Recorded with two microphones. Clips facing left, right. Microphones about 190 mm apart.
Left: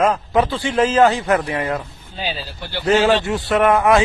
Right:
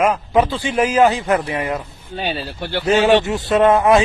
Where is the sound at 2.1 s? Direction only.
60° right (ahead or behind).